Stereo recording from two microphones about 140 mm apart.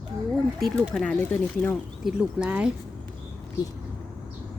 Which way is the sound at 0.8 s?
5° left (ahead or behind).